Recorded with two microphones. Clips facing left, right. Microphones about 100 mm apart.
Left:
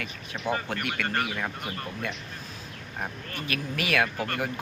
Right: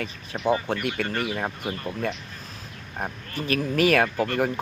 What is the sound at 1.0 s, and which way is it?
Speech, 45° left (ahead or behind).